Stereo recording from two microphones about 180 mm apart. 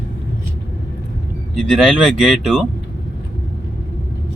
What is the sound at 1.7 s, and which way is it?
Speech, 5° right (ahead or behind).